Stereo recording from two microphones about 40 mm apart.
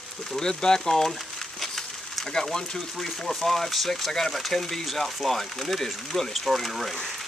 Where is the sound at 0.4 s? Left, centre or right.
Centre.